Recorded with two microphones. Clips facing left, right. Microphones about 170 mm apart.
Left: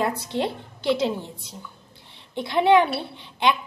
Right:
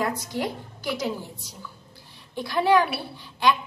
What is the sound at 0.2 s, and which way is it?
A woman's voice, 25° left (ahead or behind).